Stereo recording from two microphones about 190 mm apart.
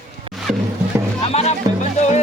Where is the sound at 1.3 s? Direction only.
35° left (ahead or behind).